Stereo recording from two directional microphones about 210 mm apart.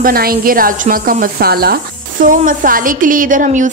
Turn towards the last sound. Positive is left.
turn(degrees=-35)  # may be behind; listen again after turning